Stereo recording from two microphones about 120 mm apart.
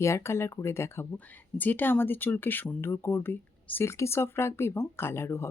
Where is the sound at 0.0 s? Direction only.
25° left (ahead or behind).